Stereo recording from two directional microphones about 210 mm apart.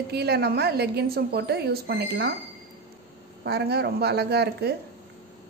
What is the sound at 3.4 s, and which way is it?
A woman's voice, 50° right (ahead or behind).